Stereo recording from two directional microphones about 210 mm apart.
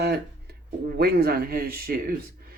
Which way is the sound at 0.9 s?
45° right (ahead or behind).